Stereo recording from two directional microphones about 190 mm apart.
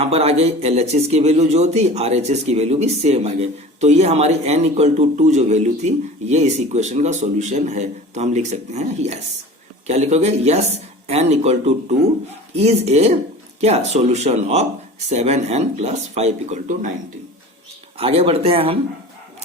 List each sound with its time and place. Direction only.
0.0 s speech: 30° right (ahead or behind)
17.9 s speech: 30° right (ahead or behind)